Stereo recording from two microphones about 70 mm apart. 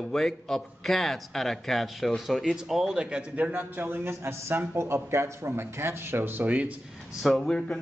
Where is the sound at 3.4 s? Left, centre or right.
Right.